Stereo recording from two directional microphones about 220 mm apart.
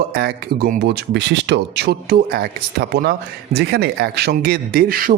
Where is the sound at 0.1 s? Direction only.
45° right (ahead or behind).